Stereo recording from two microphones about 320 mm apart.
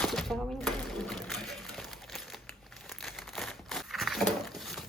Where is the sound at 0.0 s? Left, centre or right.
Centre.